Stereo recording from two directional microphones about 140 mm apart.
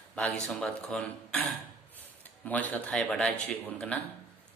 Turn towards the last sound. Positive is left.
turn(degrees=10)  # may be behind; listen again after turning